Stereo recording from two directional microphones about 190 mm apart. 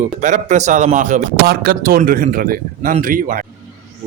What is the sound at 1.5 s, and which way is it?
Speech, 50° right (ahead or behind).